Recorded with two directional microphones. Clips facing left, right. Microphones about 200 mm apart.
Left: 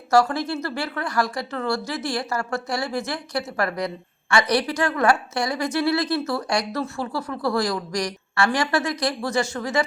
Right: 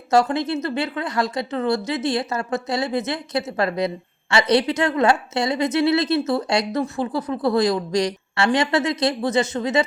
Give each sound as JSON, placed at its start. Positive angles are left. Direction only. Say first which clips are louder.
{"t": 0.1, "sound": "speech", "louder": "right 1 dB", "side_deg": -20}